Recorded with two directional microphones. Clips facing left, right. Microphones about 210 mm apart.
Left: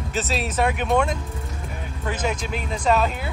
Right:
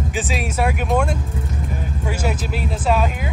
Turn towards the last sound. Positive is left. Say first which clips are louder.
# right 1 dB
turn(degrees=-10)  # may be behind; listen again after turning